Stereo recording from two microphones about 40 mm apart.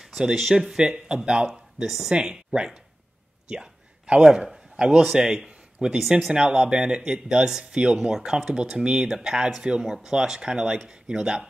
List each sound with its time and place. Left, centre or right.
0.3 s speech: centre
3.4 s a sound: right
4.2 s speech: centre
4.7 s a man's voice: right
5.0 s speech: centre
7.7 s speech: right
8.0 s speech: centre